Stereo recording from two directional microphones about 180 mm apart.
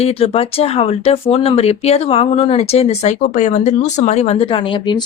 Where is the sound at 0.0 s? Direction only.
35° left (ahead or behind).